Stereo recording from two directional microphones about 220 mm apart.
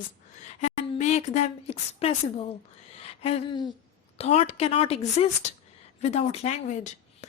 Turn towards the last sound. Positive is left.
turn(degrees=35)  # may be behind; listen again after turning